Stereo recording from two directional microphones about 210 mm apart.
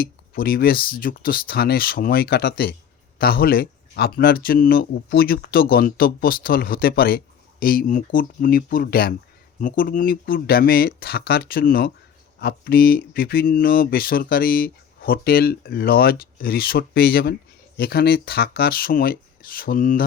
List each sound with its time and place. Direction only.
0.0 s speech: 45° left (ahead or behind)